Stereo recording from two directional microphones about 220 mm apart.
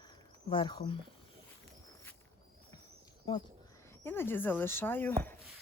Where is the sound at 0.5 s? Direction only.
20° left (ahead or behind).